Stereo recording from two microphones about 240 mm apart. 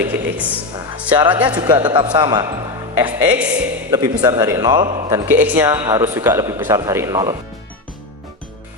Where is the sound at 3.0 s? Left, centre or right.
Centre.